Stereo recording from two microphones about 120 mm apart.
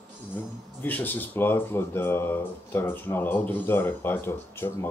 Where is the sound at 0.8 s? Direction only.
15° left (ahead or behind).